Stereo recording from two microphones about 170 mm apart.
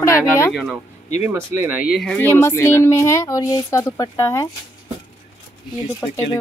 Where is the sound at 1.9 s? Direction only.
5° left (ahead or behind).